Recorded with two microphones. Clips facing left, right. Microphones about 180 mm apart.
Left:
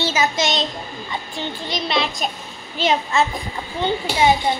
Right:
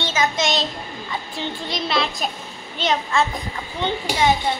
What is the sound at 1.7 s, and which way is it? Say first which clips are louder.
A child's voice: left 1 dB; centre (ahead or behind).